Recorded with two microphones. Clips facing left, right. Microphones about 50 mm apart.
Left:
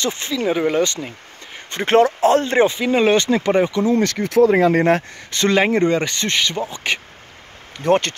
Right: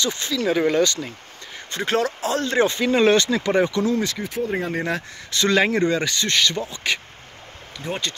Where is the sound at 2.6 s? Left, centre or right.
Centre.